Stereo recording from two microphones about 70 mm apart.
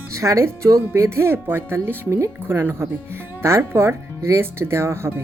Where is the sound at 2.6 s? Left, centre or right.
Right.